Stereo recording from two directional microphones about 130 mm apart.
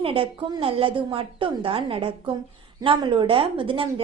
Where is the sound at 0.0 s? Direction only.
45° right (ahead or behind).